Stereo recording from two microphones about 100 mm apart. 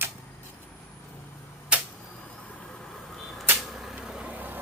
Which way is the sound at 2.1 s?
10° left (ahead or behind).